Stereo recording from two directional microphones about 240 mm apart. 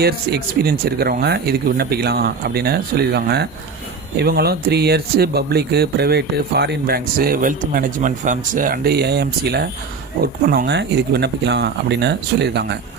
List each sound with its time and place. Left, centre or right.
0.0 s speech: right